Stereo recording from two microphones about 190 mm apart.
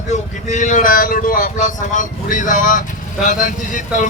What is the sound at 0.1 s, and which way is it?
A man's voice, 40° left (ahead or behind).